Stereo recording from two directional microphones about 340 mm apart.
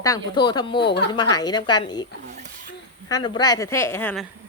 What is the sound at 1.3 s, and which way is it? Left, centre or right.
A woman's voice, centre.